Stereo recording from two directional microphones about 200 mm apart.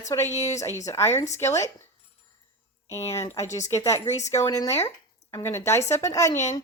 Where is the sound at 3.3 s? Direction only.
15° left (ahead or behind).